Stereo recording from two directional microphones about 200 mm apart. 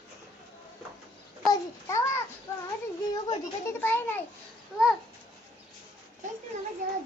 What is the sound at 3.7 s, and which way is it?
Speech, 10° left (ahead or behind).